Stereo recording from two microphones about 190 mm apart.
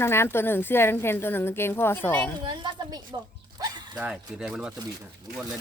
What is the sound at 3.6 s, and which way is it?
Dog, 20° right (ahead or behind).